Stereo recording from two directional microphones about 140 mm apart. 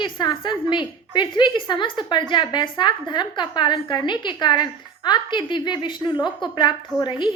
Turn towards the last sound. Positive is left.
turn(degrees=35)  # may be behind; listen again after turning